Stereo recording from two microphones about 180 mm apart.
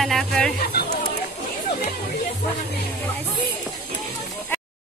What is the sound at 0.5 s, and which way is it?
Speech, 60° left (ahead or behind).